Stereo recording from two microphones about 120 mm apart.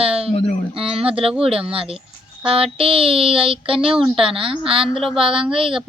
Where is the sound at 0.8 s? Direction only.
50° right (ahead or behind).